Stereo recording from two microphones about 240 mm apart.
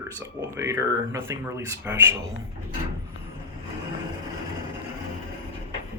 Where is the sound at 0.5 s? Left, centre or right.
Centre.